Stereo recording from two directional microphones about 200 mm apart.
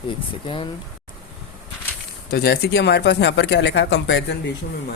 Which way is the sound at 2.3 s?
50° left (ahead or behind).